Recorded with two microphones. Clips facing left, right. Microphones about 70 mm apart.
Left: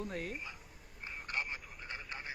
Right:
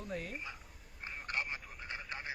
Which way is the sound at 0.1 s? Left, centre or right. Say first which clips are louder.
Left 1 dB; left.